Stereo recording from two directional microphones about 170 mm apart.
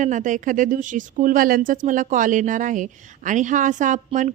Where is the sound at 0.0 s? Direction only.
50° right (ahead or behind).